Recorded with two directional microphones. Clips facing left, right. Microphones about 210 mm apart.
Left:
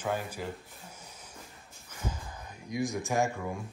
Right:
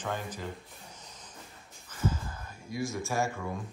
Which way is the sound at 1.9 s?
15° left (ahead or behind).